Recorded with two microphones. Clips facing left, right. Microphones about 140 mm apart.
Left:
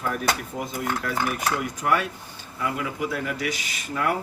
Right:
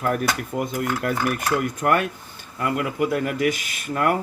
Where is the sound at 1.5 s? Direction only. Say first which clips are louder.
Right 4 dB; 55° right (ahead or behind).